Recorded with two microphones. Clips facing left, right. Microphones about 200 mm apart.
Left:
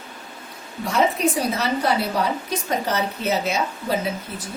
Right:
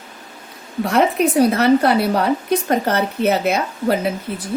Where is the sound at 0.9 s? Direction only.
60° right (ahead or behind).